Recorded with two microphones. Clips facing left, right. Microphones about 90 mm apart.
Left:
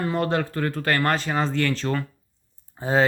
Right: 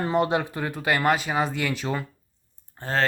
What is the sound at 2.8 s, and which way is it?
Speech, 10° left (ahead or behind).